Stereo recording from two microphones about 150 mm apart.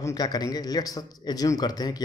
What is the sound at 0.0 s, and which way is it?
A man's voice, 25° left (ahead or behind).